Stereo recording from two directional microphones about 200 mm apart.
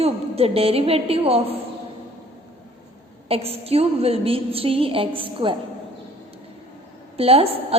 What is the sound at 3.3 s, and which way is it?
A woman's voice, 30° right (ahead or behind).